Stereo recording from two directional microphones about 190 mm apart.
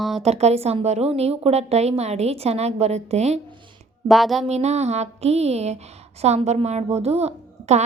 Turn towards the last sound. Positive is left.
turn(degrees=-35)  # may be behind; listen again after turning